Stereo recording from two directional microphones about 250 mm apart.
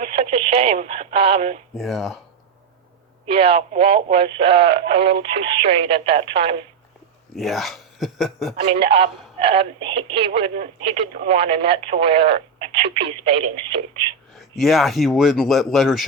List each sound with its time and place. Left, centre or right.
0.0 s radio: right
1.7 s speech: centre
3.2 s speech: right
7.3 s speech: centre
8.6 s speech: right
14.3 s speech: centre